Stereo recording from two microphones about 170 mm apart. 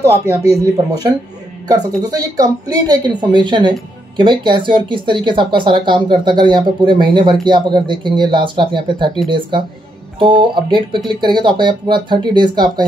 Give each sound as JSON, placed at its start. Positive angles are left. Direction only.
{"t": 0.0, "sound": "speech", "side_deg": -15}
{"t": 1.7, "sound": "speech", "side_deg": -20}